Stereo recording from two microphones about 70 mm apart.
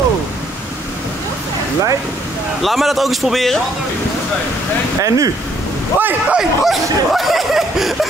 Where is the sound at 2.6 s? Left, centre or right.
Centre.